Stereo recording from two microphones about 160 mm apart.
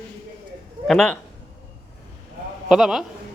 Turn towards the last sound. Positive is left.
turn(degrees=0)  # may be behind; listen again after turning